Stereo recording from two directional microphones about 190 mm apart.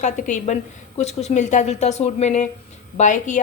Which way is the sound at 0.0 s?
40° left (ahead or behind).